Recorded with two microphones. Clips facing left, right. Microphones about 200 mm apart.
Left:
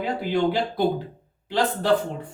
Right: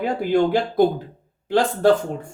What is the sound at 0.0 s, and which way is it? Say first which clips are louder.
Speech: right 4 dB; 50° right (ahead or behind).